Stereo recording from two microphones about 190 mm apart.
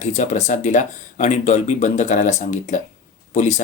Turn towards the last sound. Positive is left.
turn(degrees=40)  # may be behind; listen again after turning